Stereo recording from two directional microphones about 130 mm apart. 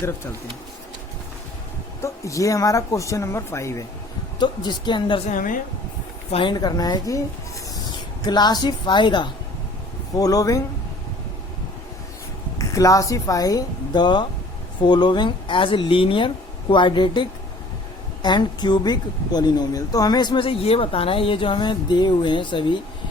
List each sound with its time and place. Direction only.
2.0 s speech: 25° left (ahead or behind)
4.4 s speech: 35° left (ahead or behind)
5.2 s a woman's voice: 85° left
6.3 s speech: 35° left (ahead or behind)
8.2 s speech: 35° left (ahead or behind)
12.5 s speech: 25° left (ahead or behind)